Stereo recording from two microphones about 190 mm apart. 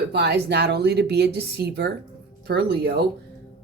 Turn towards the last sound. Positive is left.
turn(degrees=-60)  # may be behind; listen again after turning